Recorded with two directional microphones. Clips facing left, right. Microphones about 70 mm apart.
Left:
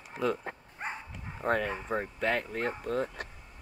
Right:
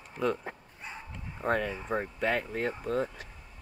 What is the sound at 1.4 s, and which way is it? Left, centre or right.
Speech, centre.